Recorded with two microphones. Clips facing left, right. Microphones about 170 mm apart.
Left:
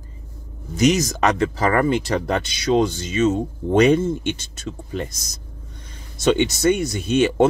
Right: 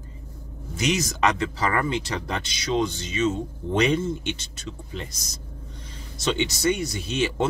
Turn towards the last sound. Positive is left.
turn(degrees=50)  # may be behind; listen again after turning